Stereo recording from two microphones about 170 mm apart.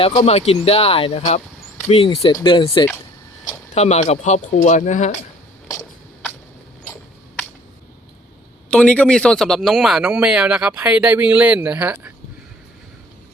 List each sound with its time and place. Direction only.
0.1 s speech: 40° left (ahead or behind)
3.8 s speech: 40° left (ahead or behind)
8.7 s a man's voice: 5° left (ahead or behind); by 12.1 s 10° right (ahead or behind)